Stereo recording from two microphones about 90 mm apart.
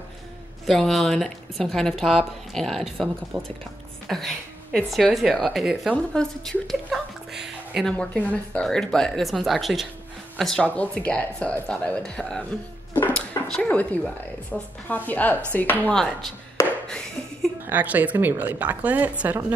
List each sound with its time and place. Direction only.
0.7 s speech: 5° left (ahead or behind)
3.3 s speech: 65° right (ahead or behind)
4.1 s speech: centre (ahead or behind)
5.9 s a woman's voice: 10° left (ahead or behind); by 7.8 s 5° right (ahead or behind)
7.8 s speech: 10° left (ahead or behind)
10.8 s speech: 15° left (ahead or behind)
13.6 s a woman's voice: 15° left (ahead or behind)
15.9 s speech: 5° left (ahead or behind)
16.8 s a sound: 10° left (ahead or behind)
17.6 s a woman's voice: 20° right (ahead or behind)